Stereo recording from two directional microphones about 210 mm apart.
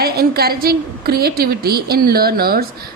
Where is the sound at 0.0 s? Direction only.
50° right (ahead or behind).